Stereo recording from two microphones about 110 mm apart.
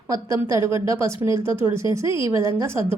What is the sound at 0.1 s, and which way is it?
A woman's voice, 30° right (ahead or behind).